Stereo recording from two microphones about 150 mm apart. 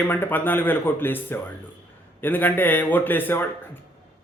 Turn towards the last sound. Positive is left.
turn(degrees=15)  # may be behind; listen again after turning